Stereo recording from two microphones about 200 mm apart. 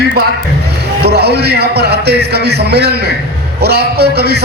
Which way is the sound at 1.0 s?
55° right (ahead or behind).